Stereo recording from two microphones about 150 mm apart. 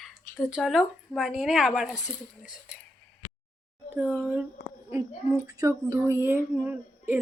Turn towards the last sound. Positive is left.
turn(degrees=-15)  # may be behind; listen again after turning